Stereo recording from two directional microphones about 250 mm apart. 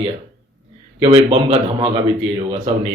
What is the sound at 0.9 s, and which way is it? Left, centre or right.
Speech, right.